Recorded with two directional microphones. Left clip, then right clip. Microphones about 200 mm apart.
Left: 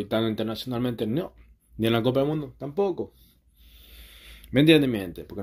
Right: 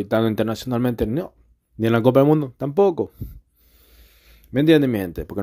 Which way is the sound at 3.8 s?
20° right (ahead or behind).